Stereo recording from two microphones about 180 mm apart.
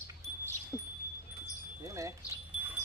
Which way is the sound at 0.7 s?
15° left (ahead or behind).